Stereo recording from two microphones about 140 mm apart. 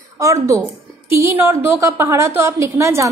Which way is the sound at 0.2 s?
20° right (ahead or behind).